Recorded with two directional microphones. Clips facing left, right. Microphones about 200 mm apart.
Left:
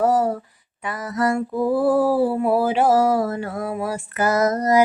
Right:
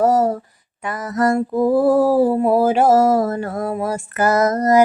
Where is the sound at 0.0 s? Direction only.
40° right (ahead or behind).